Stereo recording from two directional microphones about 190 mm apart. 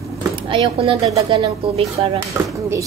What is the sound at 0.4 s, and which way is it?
Speech, 30° right (ahead or behind).